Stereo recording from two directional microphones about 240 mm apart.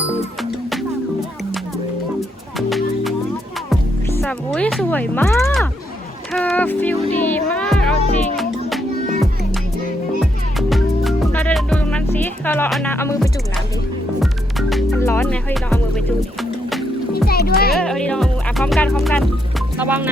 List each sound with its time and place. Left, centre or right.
2.6 s music: centre
4.2 s music: centre
10.2 s music: centre
14.9 s music: centre
17.2 s music: left
17.7 s speech: centre